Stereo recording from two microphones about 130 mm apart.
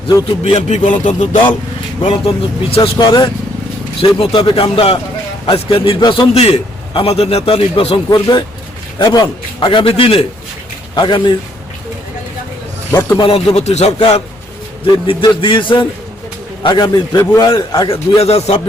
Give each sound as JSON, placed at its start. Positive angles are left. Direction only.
{"t": 0.4, "sound": "a man's voice", "side_deg": 55}
{"t": 2.0, "sound": "a man's voice", "side_deg": 40}
{"t": 3.0, "sound": "a man's voice", "side_deg": 35}
{"t": 4.0, "sound": "a man's voice", "side_deg": 50}
{"t": 6.3, "sound": "a man's voice", "side_deg": 50}
{"t": 9.6, "sound": "a man's voice", "side_deg": 40}
{"t": 10.9, "sound": "a man's voice", "side_deg": 35}
{"t": 12.9, "sound": "speech", "side_deg": 20}
{"t": 13.1, "sound": "a man's voice", "side_deg": 45}
{"t": 14.8, "sound": "a man's voice", "side_deg": 35}